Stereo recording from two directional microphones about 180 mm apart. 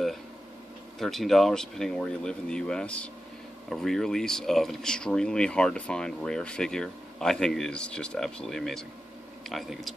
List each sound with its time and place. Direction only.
0.9 s speech: centre (ahead or behind)